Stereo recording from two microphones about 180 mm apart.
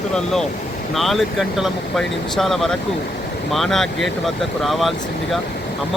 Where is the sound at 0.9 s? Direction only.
Centre (ahead or behind).